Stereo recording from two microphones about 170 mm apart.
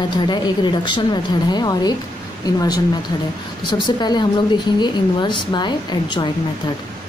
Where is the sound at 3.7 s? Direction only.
25° left (ahead or behind).